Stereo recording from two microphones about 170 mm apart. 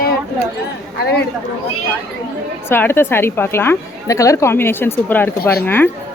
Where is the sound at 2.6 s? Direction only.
15° left (ahead or behind).